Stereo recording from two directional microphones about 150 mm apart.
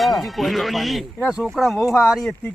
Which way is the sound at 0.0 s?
Centre (ahead or behind).